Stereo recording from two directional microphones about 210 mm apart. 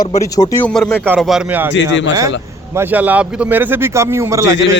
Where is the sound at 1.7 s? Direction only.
60° left (ahead or behind).